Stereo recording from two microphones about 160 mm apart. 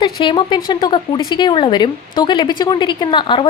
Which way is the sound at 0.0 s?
30° left (ahead or behind).